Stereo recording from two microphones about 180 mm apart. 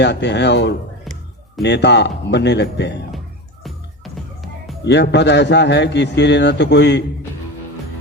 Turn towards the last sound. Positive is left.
turn(degrees=70)  # may be behind; listen again after turning